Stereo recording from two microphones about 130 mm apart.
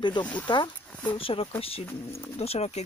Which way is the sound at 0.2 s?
10° left (ahead or behind).